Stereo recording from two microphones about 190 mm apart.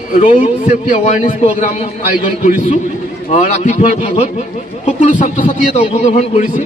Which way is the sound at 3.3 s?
40° left (ahead or behind).